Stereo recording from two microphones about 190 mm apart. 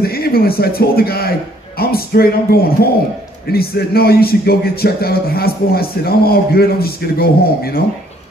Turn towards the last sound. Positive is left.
turn(degrees=55)  # may be behind; listen again after turning